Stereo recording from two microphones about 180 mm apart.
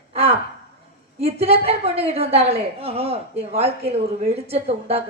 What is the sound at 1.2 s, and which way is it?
Speech, 35° right (ahead or behind).